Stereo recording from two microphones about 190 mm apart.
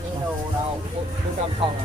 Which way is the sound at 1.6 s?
30° right (ahead or behind).